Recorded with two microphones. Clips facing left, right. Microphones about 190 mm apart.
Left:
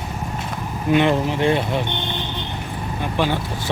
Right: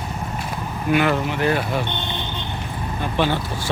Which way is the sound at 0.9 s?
25° left (ahead or behind).